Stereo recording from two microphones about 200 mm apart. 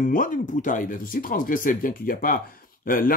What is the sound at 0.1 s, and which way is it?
Speech, 40° left (ahead or behind).